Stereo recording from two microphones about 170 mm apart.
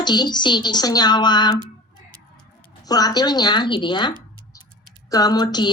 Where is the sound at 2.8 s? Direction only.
25° left (ahead or behind).